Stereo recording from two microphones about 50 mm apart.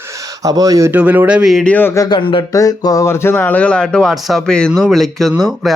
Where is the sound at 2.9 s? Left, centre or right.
Left.